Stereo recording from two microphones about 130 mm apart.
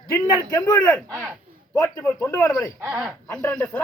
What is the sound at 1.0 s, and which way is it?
Speech, 5° left (ahead or behind).